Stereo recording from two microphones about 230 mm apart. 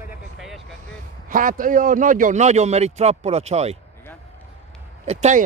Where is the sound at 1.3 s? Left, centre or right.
Right.